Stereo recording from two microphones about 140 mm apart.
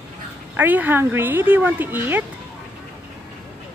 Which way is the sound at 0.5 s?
10° right (ahead or behind).